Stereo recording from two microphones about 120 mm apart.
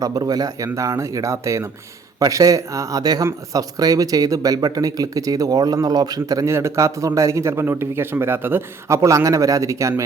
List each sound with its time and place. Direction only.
0.0 s speech: 35° right (ahead or behind)